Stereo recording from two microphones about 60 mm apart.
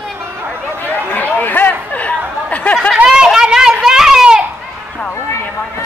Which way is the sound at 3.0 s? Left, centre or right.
Centre.